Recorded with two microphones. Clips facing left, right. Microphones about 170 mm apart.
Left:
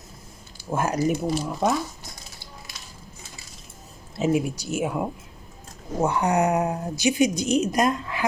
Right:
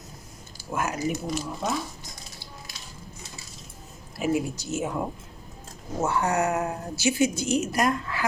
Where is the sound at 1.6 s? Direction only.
60° left (ahead or behind).